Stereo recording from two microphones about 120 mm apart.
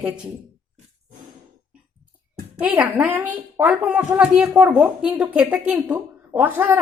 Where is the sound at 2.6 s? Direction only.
10° right (ahead or behind).